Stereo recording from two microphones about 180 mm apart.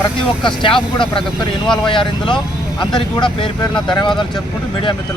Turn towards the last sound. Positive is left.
turn(degrees=25)  # may be behind; listen again after turning